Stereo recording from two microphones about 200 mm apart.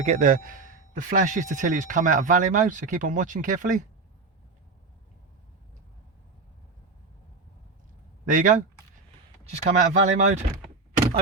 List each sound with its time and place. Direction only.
0.0 s speech: 35° right (ahead or behind)
8.3 s speech: 40° right (ahead or behind)